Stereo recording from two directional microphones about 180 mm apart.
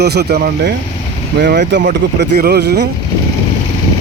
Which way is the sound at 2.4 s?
65° right (ahead or behind).